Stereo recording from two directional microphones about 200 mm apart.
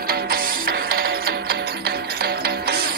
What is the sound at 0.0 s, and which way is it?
Music, 50° right (ahead or behind).